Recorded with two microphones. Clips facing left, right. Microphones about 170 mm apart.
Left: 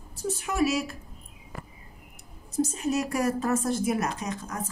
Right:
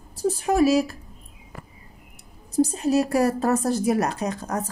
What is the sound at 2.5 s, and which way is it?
A woman's voice, 35° right (ahead or behind).